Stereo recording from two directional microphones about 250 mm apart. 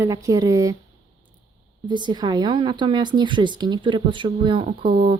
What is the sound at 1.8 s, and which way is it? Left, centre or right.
Speech, centre.